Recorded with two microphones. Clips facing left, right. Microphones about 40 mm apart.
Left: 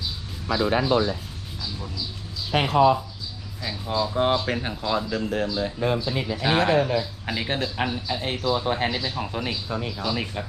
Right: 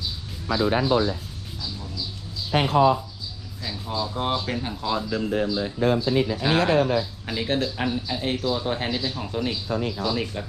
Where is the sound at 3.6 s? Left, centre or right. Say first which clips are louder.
Left 3 dB; left.